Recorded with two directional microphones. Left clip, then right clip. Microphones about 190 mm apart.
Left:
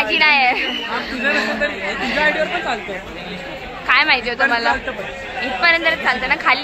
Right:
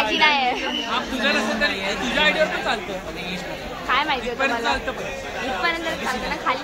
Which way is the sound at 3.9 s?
10° left (ahead or behind).